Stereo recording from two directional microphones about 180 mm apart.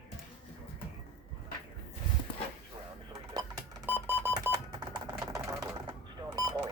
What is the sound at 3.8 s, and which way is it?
Music, 10° right (ahead or behind).